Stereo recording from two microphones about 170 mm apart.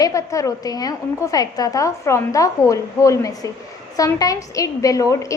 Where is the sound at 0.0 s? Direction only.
20° left (ahead or behind).